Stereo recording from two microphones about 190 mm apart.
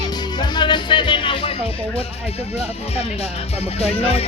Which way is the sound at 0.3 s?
25° left (ahead or behind).